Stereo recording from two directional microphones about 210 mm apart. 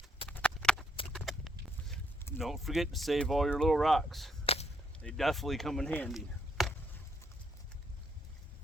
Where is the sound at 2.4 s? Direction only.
Centre (ahead or behind).